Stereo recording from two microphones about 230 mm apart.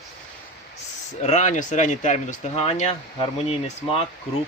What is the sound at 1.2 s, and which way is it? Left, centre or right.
Speech, left.